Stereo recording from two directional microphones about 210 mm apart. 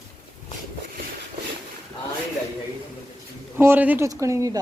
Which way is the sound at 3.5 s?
10° right (ahead or behind).